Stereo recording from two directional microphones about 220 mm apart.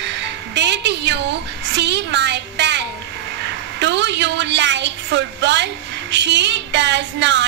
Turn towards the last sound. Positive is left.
turn(degrees=-55)  # may be behind; listen again after turning